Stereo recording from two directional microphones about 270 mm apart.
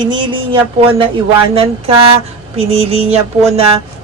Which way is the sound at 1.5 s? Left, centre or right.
Right.